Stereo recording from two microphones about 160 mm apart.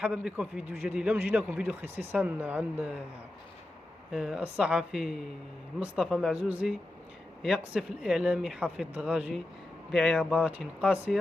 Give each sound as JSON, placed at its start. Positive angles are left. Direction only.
{"t": 0.0, "sound": "a man's voice", "side_deg": -5}
{"t": 4.1, "sound": "a man's voice", "side_deg": -5}